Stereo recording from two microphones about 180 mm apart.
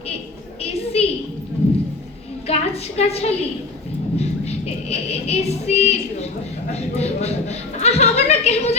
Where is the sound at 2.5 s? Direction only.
35° left (ahead or behind).